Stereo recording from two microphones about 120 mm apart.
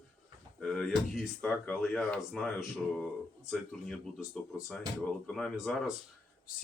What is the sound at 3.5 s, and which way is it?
Speech, 5° left (ahead or behind).